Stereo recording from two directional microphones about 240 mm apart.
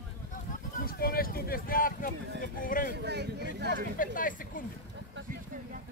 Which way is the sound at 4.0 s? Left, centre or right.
Left.